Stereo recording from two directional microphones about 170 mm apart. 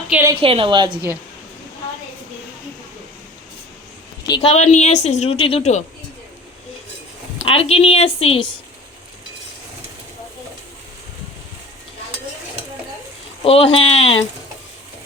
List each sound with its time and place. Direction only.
0.1 s a sound: 15° right (ahead or behind)
0.3 s a woman's voice: 35° right (ahead or behind)
4.5 s a woman's voice: 40° left (ahead or behind)
7.4 s a woman's voice: 35° left (ahead or behind)
13.4 s a woman's voice: 35° left (ahead or behind)